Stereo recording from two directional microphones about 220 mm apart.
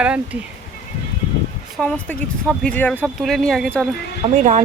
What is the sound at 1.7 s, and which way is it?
Speech, 5° left (ahead or behind).